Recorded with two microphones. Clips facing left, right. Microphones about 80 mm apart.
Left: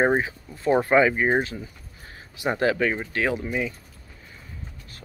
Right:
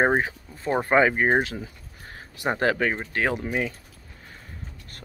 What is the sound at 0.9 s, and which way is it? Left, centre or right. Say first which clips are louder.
Speech: right 2 dB; right.